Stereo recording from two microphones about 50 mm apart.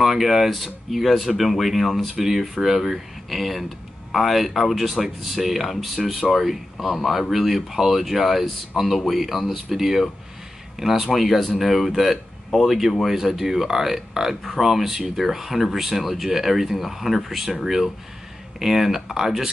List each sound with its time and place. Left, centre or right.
0.0 s speech: centre